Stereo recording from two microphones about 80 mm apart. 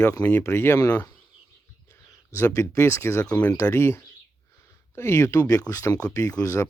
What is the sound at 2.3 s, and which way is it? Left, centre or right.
Speech, left.